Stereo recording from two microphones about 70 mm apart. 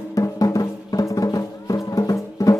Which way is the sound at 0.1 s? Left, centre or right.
Left.